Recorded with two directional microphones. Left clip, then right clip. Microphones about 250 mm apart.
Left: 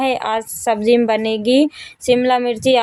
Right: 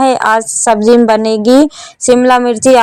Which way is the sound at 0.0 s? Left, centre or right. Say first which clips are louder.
Right 9 dB; right.